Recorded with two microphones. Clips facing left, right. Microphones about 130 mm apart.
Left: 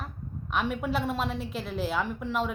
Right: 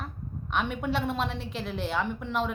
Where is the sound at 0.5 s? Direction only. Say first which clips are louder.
Even; centre (ahead or behind).